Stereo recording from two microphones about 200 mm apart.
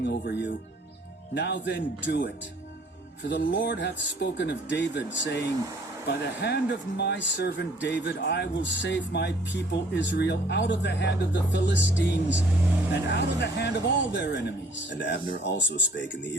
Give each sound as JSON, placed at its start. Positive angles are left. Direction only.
{"t": 0.0, "sound": "speech", "side_deg": 60}